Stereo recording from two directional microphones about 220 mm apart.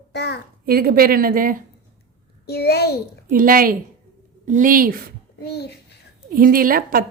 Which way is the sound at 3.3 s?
40° right (ahead or behind).